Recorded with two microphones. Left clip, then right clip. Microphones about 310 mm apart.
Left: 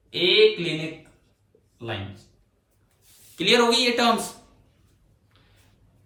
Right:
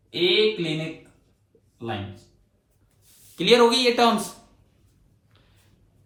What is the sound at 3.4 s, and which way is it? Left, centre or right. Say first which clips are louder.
Speech: right 2 dB; centre.